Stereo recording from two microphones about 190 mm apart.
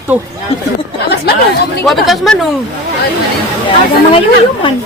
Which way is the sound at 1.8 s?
Centre (ahead or behind).